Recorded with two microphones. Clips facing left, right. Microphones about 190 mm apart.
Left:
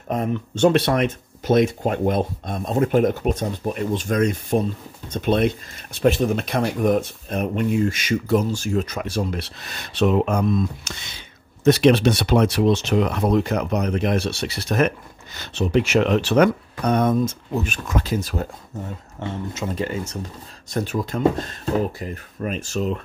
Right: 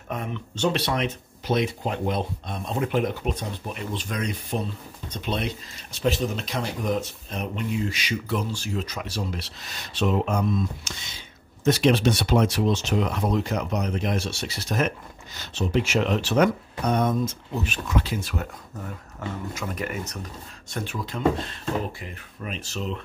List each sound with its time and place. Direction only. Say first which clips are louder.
0.1 s speech: left 8 dB; 40° left (ahead or behind)
20.7 s speech: left 7 dB; 40° left (ahead or behind)